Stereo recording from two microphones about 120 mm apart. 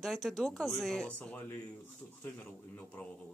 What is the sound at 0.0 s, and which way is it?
Speech, centre (ahead or behind).